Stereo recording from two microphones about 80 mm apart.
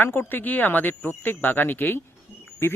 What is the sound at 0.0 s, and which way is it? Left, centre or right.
A man's voice, left.